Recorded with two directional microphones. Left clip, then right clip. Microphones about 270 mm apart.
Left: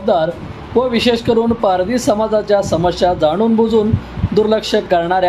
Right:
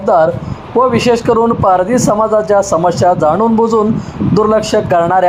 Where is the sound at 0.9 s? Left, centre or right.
Centre.